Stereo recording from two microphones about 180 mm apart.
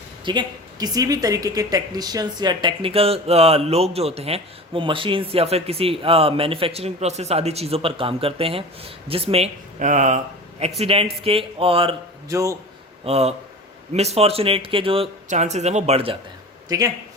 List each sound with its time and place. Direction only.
0.3 s speech: 25° right (ahead or behind); by 10.2 s 45° right (ahead or behind)
10.8 s speech: 35° right (ahead or behind)
12.3 s a man's voice: 15° right (ahead or behind)
13.1 s speech: 35° right (ahead or behind)
16.6 s speech: 20° right (ahead or behind)